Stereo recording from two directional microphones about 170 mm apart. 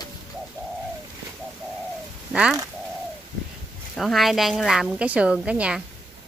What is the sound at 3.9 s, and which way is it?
A woman's voice, centre (ahead or behind).